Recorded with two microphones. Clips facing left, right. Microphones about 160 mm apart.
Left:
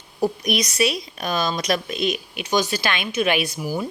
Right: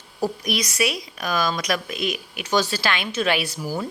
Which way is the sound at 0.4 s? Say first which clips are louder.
Left 3 dB; 20° left (ahead or behind).